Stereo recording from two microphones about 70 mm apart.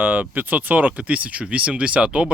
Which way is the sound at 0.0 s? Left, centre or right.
Right.